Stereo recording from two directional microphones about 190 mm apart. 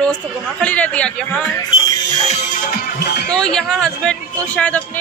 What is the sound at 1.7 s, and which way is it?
Music, 30° left (ahead or behind).